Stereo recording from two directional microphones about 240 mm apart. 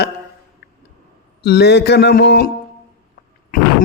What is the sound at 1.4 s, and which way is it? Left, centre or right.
A man's voice, left.